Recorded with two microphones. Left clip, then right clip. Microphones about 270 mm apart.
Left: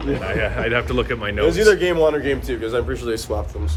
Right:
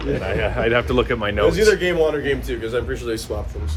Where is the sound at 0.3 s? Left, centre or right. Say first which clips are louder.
Right 2 dB; centre.